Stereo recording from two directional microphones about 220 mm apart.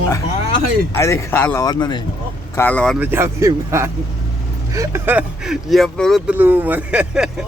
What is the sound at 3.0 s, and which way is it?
Speech, 10° right (ahead or behind).